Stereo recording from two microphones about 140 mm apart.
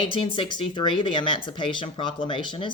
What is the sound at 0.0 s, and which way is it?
Speech, 40° left (ahead or behind).